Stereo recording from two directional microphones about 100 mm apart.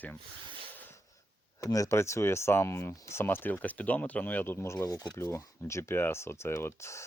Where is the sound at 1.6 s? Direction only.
35° left (ahead or behind).